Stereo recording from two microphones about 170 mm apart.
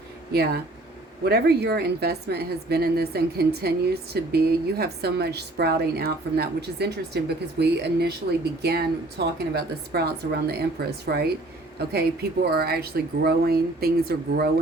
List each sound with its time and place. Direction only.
0.3 s a woman's voice: 70° right (ahead or behind)
12.5 s a woman's voice: 70° right (ahead or behind)